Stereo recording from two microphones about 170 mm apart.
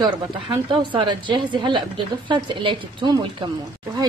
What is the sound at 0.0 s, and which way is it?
A woman's voice, 30° right (ahead or behind).